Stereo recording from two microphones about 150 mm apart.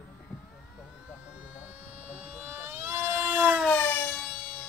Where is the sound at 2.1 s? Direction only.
15° right (ahead or behind).